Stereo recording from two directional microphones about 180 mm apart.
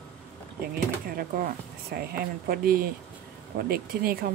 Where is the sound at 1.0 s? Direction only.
50° right (ahead or behind).